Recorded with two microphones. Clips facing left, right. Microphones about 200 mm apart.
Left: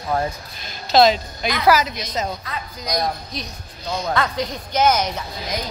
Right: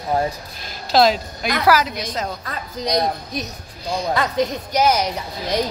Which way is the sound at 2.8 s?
30° right (ahead or behind).